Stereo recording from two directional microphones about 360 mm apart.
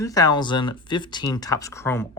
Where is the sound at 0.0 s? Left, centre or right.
Centre.